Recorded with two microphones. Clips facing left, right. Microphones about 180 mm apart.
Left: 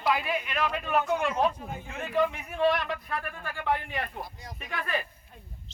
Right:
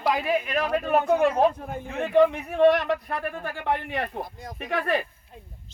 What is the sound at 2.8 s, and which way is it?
Speech, 40° right (ahead or behind).